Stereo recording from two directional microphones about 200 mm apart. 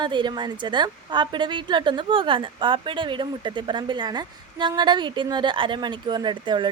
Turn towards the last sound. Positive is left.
turn(degrees=-25)  # may be behind; listen again after turning